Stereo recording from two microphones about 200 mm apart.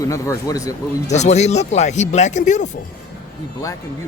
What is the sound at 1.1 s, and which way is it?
Speech, 35° left (ahead or behind).